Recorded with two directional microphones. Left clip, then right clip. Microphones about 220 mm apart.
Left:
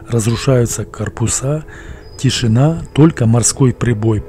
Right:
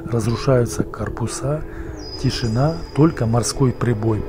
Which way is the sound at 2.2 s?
55° left (ahead or behind).